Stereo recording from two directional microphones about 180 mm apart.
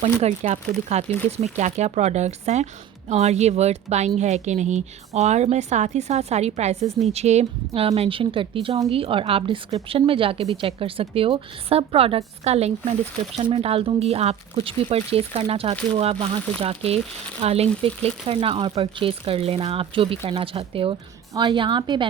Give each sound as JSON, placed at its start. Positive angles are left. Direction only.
{"t": 0.0, "sound": "a woman's voice", "side_deg": -35}